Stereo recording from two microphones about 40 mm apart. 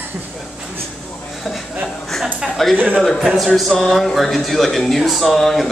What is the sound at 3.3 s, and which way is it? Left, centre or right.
Speech, centre.